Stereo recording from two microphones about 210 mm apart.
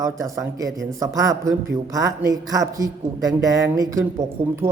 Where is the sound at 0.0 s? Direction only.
15° right (ahead or behind).